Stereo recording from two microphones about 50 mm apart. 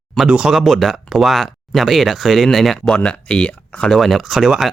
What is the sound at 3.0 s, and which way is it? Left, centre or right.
Speech, left.